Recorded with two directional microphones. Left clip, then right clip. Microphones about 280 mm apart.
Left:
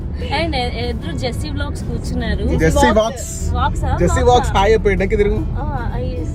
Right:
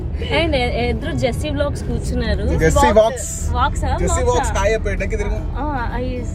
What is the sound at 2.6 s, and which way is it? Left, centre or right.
Speech, right.